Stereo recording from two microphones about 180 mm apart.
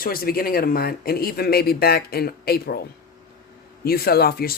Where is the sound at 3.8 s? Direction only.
60° left (ahead or behind).